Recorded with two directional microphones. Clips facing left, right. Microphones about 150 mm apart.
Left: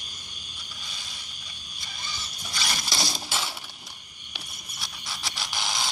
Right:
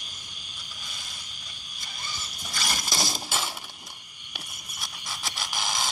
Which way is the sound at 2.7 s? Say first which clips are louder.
Right 1 dB; 20° right (ahead or behind).